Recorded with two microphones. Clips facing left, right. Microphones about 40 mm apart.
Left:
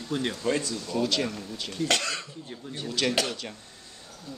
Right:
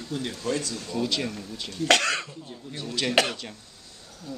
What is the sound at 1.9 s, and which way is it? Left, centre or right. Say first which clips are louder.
Speech: right 7 dB; right.